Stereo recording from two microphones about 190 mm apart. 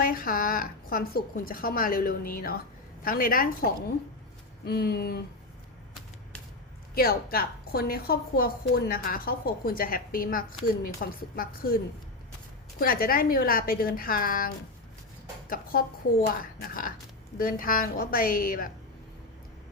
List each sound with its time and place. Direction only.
0.0 s a woman's voice: 50° left (ahead or behind)
4.6 s a sound: 55° left (ahead or behind)
6.9 s a woman's voice: 55° left (ahead or behind)
12.8 s a woman's voice: 50° left (ahead or behind)